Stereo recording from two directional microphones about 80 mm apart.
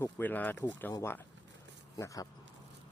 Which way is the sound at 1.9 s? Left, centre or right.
Left.